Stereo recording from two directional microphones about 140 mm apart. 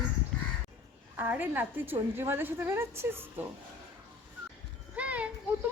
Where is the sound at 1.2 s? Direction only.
15° right (ahead or behind).